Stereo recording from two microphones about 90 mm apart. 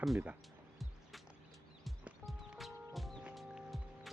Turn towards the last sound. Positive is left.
turn(degrees=0)  # may be behind; listen again after turning